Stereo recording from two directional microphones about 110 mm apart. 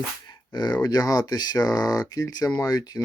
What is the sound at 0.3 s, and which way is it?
Speech, 40° left (ahead or behind).